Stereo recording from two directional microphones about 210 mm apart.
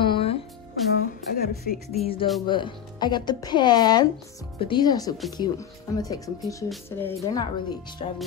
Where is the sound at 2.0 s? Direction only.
25° left (ahead or behind); by 7.4 s 10° left (ahead or behind).